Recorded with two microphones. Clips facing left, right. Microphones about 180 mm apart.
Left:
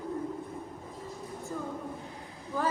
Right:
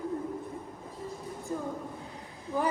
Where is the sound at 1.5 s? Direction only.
15° right (ahead or behind).